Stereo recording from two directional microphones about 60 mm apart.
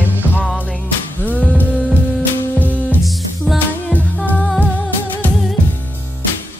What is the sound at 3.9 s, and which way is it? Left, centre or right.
Music, left.